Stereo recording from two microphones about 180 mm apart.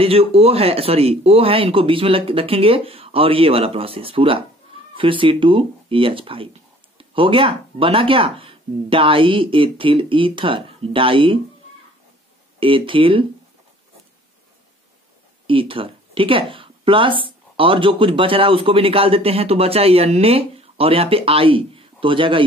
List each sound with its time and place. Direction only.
0.0 s a man's voice: 35° right (ahead or behind)
12.5 s speech: 30° right (ahead or behind)
15.4 s a man's voice: 30° right (ahead or behind)